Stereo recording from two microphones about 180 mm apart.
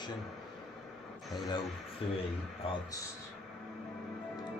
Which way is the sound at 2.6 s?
30° left (ahead or behind).